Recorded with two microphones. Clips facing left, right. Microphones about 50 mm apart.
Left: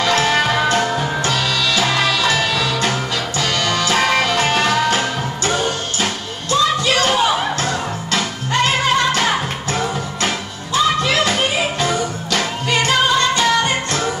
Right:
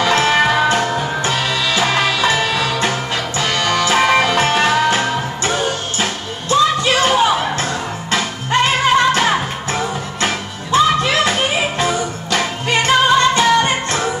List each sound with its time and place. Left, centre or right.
0.0 s music: centre
0.7 s music: centre
1.2 s music: right
2.7 s music: centre
3.3 s music: right; by 6.0 s centre
6.5 s music: right
7.1 s music: centre
8.1 s music: right
10.7 s music: right